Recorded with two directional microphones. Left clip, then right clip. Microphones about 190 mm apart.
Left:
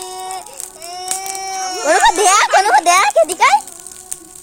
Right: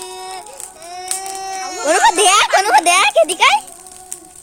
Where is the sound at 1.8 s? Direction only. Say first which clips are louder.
Left 1 dB; 5° right (ahead or behind).